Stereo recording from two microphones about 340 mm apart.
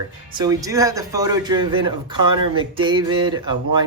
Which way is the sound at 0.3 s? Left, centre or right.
Centre.